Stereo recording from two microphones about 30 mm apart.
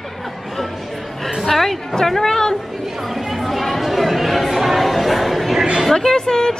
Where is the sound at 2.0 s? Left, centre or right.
Centre.